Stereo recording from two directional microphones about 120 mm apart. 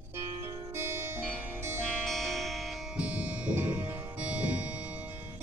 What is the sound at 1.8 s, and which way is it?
Music, centre (ahead or behind).